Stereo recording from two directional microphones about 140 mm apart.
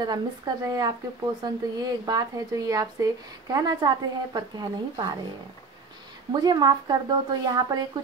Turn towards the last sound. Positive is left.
turn(degrees=-30)  # may be behind; listen again after turning